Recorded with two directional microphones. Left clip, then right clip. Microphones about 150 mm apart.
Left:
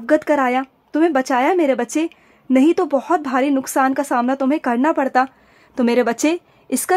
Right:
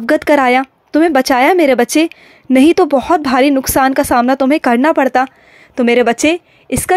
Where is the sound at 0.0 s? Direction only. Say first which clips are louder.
Right 5 dB; 25° right (ahead or behind).